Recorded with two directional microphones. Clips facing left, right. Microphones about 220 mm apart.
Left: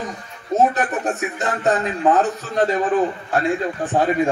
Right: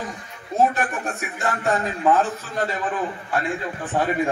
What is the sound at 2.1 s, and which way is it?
A man's voice, 40° left (ahead or behind).